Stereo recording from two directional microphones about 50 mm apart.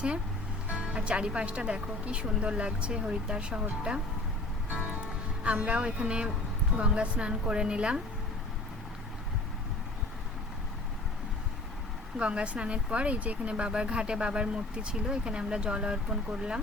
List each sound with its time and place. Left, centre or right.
0.9 s speech: right
5.5 s speech: right
12.2 s speech: right